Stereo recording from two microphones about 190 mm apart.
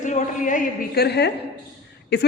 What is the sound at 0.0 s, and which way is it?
A woman's voice, 40° left (ahead or behind).